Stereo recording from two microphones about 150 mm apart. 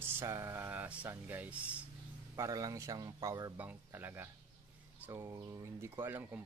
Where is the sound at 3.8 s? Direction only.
15° right (ahead or behind).